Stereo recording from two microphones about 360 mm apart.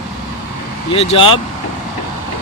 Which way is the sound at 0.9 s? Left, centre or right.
Centre.